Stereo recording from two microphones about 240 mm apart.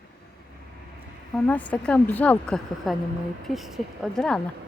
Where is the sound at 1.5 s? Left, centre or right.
Centre.